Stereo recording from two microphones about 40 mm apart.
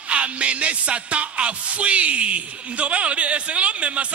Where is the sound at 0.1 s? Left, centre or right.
Right.